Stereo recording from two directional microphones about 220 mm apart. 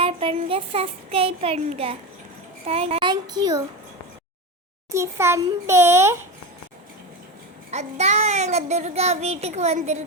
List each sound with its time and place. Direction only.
0.0 s child singing: 25° right (ahead or behind)
4.9 s a child's voice: 10° right (ahead or behind)
7.7 s child singing: 30° right (ahead or behind)